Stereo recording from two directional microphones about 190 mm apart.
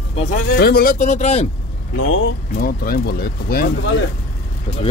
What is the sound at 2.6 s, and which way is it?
Speech, 55° left (ahead or behind).